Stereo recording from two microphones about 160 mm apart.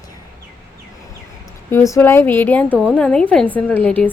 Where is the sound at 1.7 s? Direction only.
15° left (ahead or behind).